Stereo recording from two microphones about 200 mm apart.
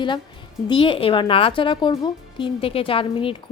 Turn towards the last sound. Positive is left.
turn(degrees=25)  # may be behind; listen again after turning